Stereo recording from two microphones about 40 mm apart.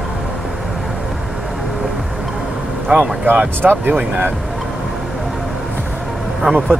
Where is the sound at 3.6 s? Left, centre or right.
Right.